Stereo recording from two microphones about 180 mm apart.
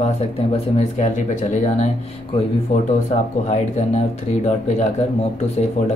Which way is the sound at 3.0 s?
40° left (ahead or behind).